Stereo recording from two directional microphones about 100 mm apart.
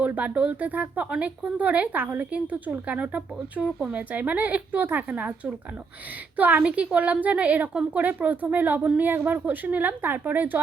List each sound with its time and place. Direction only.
0.0 s speech: 15° right (ahead or behind)
6.3 s a woman's voice: 15° right (ahead or behind)